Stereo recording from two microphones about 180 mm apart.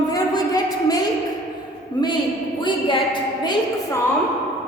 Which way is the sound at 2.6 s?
25° left (ahead or behind).